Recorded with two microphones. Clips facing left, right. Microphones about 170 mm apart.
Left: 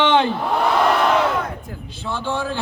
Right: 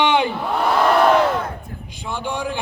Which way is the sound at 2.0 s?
15° right (ahead or behind).